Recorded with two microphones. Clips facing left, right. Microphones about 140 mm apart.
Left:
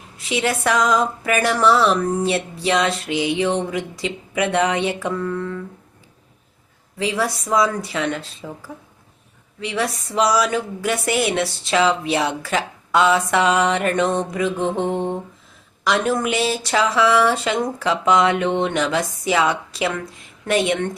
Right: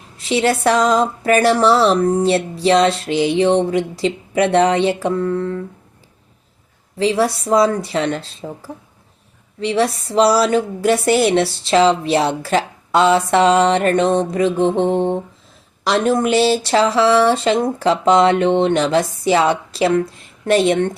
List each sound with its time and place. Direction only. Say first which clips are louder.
0.2 s a woman's voice: right 5 dB; 30° right (ahead or behind)
7.0 s a woman's voice: right 6 dB; 30° right (ahead or behind)